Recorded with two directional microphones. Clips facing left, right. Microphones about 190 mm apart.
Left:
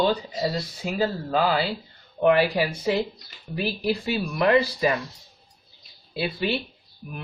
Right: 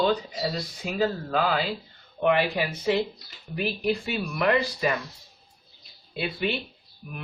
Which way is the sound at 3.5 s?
35° left (ahead or behind).